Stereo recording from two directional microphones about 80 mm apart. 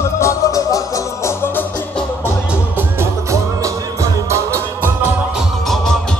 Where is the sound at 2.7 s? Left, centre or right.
Right.